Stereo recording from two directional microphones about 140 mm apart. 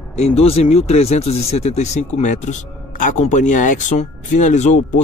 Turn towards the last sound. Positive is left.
turn(degrees=60)  # may be behind; listen again after turning